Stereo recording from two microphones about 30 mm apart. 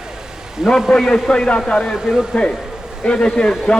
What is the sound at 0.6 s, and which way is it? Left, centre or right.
Speech, right.